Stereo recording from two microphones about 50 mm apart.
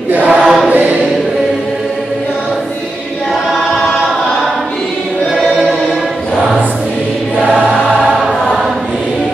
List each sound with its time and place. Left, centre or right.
0.1 s choir: right
0.4 s choir: centre
0.7 s choir: right
5.4 s chant: centre